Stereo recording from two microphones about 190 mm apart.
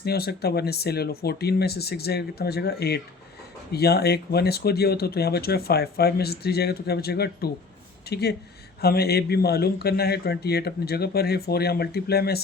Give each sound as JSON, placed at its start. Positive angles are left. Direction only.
{"t": 0.0, "sound": "speech", "side_deg": 55}